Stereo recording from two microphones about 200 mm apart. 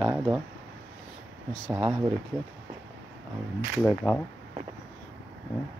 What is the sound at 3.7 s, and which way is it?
Speech, centre (ahead or behind).